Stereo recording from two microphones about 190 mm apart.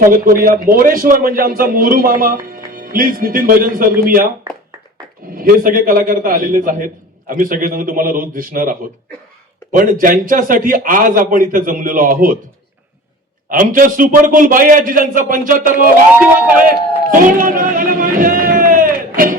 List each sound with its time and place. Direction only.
0.1 s a man's voice: 45° right (ahead or behind)
5.3 s a man's voice: 50° right (ahead or behind)
13.5 s a man's voice: 45° right (ahead or behind)
17.1 s run: 45° right (ahead or behind)